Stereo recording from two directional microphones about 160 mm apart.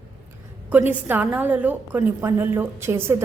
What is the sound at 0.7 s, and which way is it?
A woman's voice, 10° right (ahead or behind).